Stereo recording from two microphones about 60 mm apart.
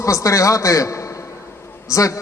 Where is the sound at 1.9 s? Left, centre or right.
Left.